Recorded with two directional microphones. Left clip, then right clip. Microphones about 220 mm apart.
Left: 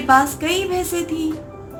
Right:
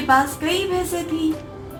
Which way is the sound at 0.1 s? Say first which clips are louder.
Left 3 dB; 20° left (ahead or behind).